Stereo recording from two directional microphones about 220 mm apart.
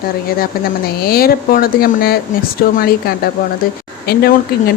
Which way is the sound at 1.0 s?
45° left (ahead or behind).